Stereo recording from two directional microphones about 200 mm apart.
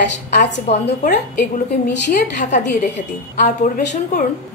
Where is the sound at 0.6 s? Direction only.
35° left (ahead or behind).